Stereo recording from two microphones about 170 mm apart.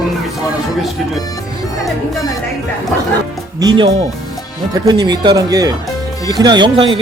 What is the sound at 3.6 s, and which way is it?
Speech, 25° right (ahead or behind).